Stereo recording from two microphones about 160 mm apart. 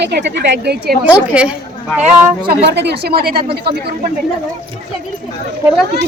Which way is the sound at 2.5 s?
90° right.